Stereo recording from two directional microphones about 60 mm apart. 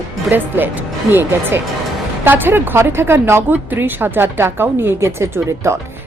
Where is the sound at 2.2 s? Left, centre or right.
Right.